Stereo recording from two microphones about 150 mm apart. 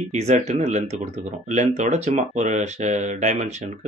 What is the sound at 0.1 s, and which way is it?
Speech, 50° right (ahead or behind).